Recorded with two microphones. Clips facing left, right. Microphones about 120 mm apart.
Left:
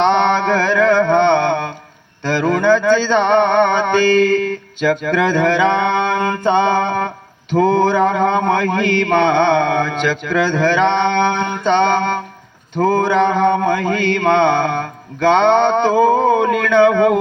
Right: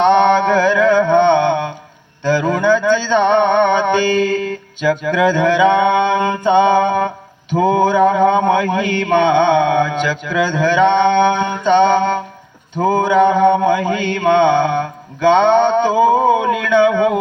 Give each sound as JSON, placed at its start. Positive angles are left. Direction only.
{"t": 0.0, "sound": "a sound", "side_deg": -15}
{"t": 1.2, "sound": "mantra", "side_deg": -15}
{"t": 2.2, "sound": "music", "side_deg": -15}
{"t": 4.8, "sound": "mantra", "side_deg": -15}
{"t": 16.8, "sound": "speech", "side_deg": 50}